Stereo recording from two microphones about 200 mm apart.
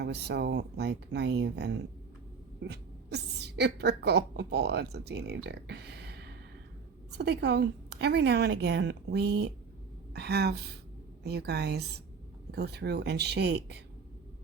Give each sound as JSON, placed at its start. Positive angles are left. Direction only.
{"t": 0.0, "sound": "a woman's voice", "side_deg": -55}